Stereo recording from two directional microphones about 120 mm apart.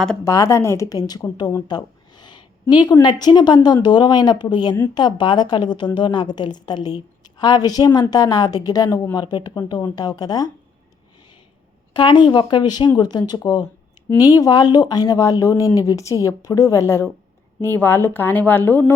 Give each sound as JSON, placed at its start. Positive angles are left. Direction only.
{"t": 0.3, "sound": "speech", "side_deg": 25}
{"t": 1.6, "sound": "a sound", "side_deg": 35}
{"t": 3.0, "sound": "a woman's voice", "side_deg": 35}
{"t": 11.9, "sound": "a woman's voice", "side_deg": 40}